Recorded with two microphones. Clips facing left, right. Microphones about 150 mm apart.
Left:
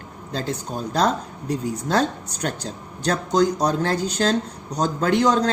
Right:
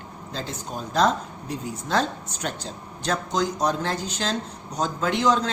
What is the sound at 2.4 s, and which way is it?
A woman's voice, 40° left (ahead or behind).